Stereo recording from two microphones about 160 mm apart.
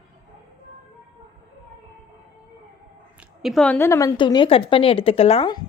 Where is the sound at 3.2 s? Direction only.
Centre (ahead or behind); by 4.1 s 15° left (ahead or behind).